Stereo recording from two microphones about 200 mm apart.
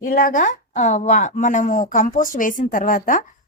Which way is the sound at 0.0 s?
45° left (ahead or behind).